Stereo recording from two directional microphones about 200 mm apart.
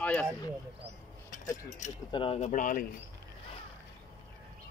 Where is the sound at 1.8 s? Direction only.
35° left (ahead or behind).